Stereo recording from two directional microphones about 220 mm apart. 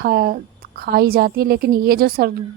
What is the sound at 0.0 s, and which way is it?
Speech, 40° right (ahead or behind).